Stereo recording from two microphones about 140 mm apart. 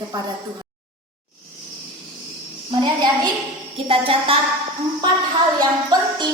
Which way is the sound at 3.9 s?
40° right (ahead or behind).